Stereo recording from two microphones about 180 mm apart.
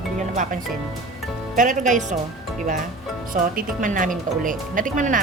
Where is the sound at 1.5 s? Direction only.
45° right (ahead or behind).